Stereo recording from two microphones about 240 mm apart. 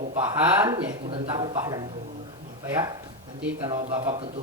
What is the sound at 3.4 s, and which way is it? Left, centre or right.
Speech, centre.